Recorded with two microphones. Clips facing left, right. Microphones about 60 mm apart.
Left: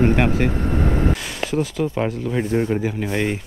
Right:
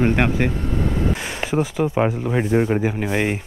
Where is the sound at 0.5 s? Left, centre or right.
Left.